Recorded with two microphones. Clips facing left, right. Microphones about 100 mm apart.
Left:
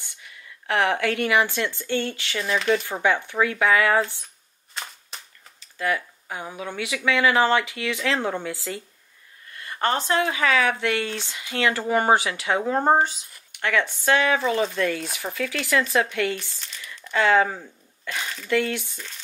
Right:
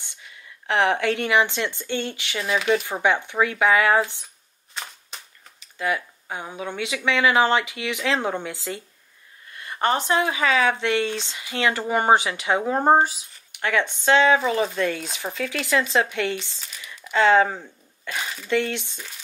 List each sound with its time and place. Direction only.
0.0 s a woman's voice: 20° right (ahead or behind)
2.4 s speech: 5° right (ahead or behind)
2.9 s speech: 20° right (ahead or behind)
5.1 s cap gun: centre (ahead or behind)
5.6 s speech: 20° right (ahead or behind)
16.6 s a sound: 5° right (ahead or behind)
17.1 s speech: 25° right (ahead or behind)